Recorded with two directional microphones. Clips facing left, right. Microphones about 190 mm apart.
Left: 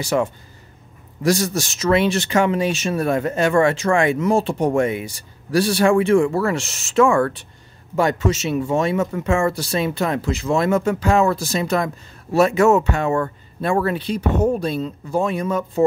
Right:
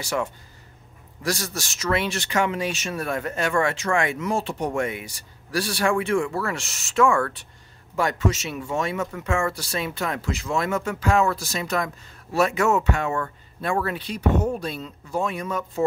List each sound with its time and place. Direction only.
0.0 s speech: 20° left (ahead or behind)